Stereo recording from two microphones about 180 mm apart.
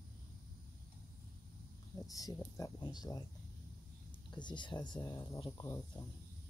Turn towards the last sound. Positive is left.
turn(degrees=20)  # may be behind; listen again after turning